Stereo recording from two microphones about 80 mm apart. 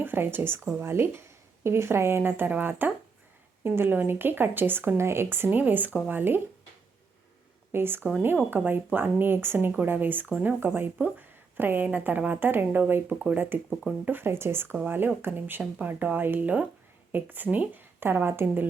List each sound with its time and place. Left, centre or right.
0.0 s a woman's voice: right
7.7 s a woman's voice: right